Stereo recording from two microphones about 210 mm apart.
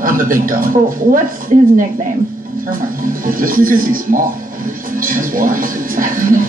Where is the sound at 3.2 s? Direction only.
40° right (ahead or behind).